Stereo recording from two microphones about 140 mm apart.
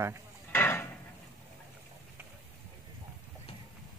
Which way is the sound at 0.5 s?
15° left (ahead or behind).